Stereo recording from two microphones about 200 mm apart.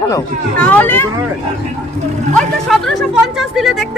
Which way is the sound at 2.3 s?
Centre (ahead or behind).